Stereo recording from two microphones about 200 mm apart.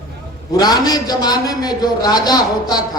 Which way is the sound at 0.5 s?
20° left (ahead or behind).